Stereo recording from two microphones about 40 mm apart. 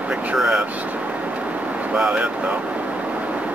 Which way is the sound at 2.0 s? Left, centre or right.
Right.